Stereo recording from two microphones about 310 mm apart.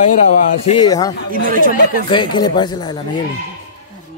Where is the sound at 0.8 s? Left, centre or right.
Centre.